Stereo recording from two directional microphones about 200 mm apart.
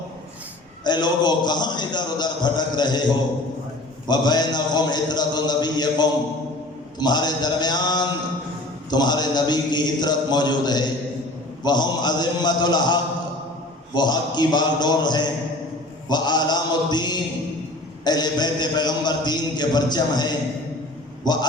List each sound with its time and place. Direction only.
0.9 s a man's voice: 20° left (ahead or behind)
4.0 s a man's voice: 20° left (ahead or behind)